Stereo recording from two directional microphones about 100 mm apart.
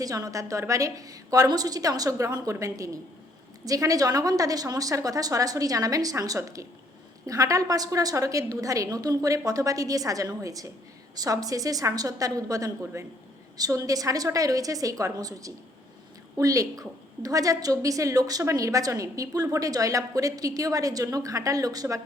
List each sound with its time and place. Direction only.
0.0 s a woman's voice: 35° right (ahead or behind)